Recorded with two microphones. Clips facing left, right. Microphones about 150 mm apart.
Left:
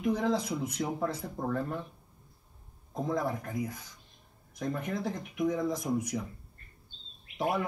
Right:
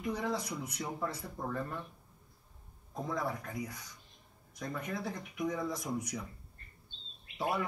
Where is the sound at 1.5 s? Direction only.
70° left (ahead or behind).